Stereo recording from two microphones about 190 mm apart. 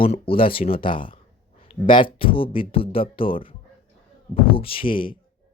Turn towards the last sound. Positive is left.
turn(degrees=25)  # may be behind; listen again after turning